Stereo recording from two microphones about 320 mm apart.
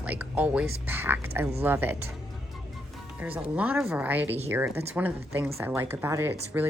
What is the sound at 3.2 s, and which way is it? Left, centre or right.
Speech, centre.